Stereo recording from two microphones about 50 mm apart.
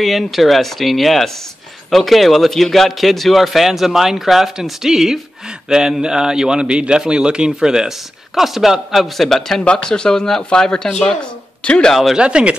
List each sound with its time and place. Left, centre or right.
0.0 s a man's voice: centre
9.7 s speech: centre
11.9 s a man's voice: centre
12.2 s speech: centre